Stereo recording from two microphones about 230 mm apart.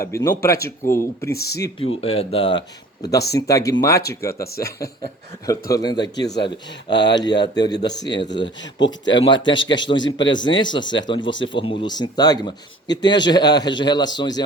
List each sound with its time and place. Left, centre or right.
0.0 s speech: centre
2.0 s a man's voice: left
5.7 s a man's voice: centre
11.2 s speech: left
11.4 s a man's voice: left